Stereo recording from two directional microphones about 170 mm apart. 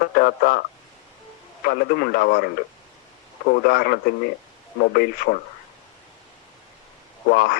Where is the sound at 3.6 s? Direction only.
65° left (ahead or behind).